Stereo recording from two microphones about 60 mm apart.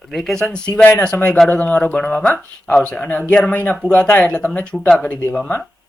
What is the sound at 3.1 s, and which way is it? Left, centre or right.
Speech, left.